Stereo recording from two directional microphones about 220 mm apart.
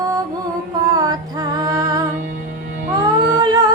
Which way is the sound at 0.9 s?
15° right (ahead or behind).